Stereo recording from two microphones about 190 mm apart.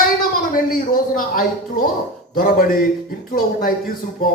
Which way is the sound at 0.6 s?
50° left (ahead or behind).